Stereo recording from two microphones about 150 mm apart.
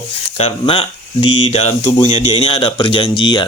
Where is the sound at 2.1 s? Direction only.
35° left (ahead or behind).